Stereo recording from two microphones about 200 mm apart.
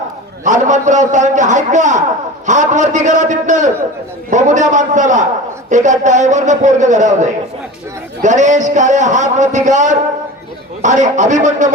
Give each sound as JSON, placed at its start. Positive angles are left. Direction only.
{"t": 0.4, "sound": "a man's voice", "side_deg": -40}